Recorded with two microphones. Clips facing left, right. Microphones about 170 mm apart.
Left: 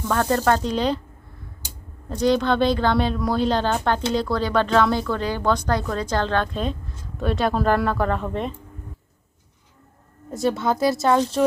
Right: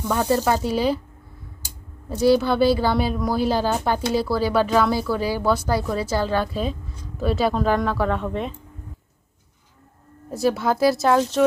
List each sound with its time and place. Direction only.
0.0 s speech: 10° right (ahead or behind)
2.0 s speech: 5° right (ahead or behind)
10.3 s speech: centre (ahead or behind)